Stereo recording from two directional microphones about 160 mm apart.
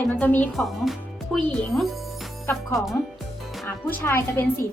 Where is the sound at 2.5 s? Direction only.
15° left (ahead or behind).